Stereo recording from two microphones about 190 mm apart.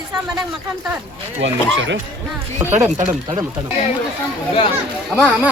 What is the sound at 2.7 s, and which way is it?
Speech, 10° right (ahead or behind).